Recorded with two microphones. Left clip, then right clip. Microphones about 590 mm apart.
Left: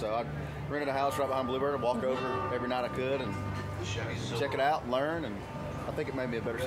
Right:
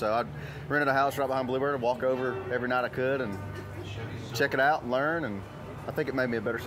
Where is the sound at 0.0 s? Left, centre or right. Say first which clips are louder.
Right 5 dB; right.